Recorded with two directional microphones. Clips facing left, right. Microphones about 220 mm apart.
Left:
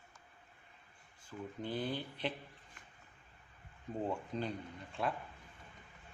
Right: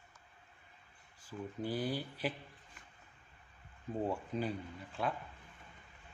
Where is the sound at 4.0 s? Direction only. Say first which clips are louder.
Right 2 dB; 5° right (ahead or behind).